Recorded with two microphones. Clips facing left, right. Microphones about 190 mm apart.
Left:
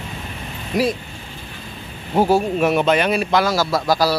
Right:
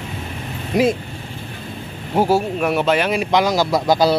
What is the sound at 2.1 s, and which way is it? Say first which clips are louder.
Speech: left 1 dB; 10° right (ahead or behind).